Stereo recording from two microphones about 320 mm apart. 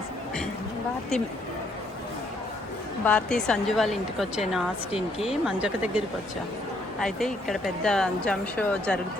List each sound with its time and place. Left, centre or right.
3.0 s speech: centre
7.0 s speech: centre